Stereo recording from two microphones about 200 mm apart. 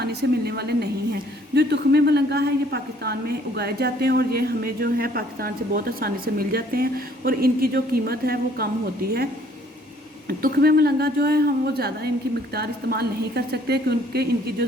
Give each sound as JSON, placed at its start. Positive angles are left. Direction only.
{"t": 0.0, "sound": "a woman's voice", "side_deg": -55}
{"t": 10.2, "sound": "a woman's voice", "side_deg": -50}